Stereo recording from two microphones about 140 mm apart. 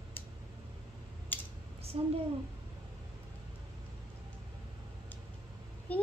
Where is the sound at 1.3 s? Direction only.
15° left (ahead or behind).